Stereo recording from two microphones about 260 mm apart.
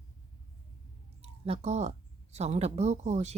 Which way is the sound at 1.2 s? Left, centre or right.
Right.